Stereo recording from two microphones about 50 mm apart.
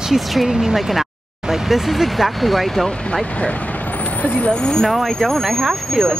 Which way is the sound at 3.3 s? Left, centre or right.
Left.